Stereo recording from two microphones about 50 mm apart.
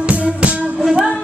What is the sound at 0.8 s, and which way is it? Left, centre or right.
Music, centre.